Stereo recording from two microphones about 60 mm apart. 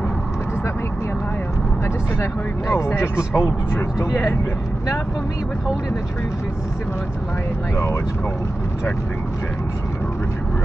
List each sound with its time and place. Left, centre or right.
2.7 s speech: left
7.7 s speech: left